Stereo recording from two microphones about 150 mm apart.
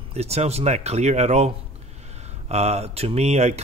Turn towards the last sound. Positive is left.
turn(degrees=-45)  # may be behind; listen again after turning